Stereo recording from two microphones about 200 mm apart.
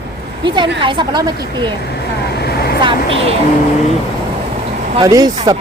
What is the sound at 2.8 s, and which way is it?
Speech, 25° right (ahead or behind).